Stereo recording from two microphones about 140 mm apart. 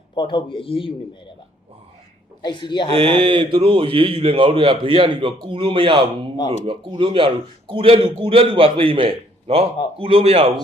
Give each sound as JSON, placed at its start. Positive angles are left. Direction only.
{"t": 0.2, "sound": "speech", "side_deg": 35}
{"t": 2.4, "sound": "speech", "side_deg": 35}
{"t": 2.9, "sound": "a man's voice", "side_deg": -40}